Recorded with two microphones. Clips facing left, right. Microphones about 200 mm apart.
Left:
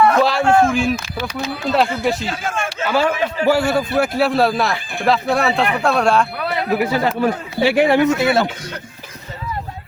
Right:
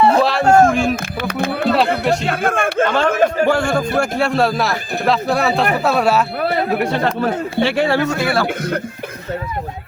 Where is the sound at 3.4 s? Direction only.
5° left (ahead or behind).